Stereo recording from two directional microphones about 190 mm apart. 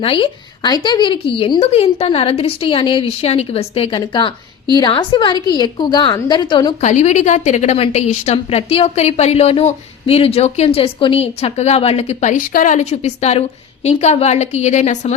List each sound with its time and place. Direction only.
0.0 s a woman's voice: 25° left (ahead or behind)
6.8 s a woman's voice: 40° left (ahead or behind)